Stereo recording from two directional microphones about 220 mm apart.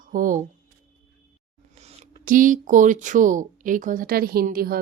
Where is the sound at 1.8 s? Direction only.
30° right (ahead or behind).